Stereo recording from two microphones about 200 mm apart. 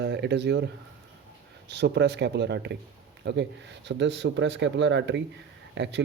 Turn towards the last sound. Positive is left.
turn(degrees=-60)  # may be behind; listen again after turning